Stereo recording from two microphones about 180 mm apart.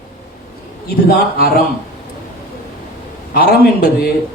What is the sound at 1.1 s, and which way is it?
Speech, 55° left (ahead or behind).